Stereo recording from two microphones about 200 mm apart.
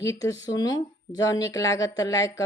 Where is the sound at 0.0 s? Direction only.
15° left (ahead or behind).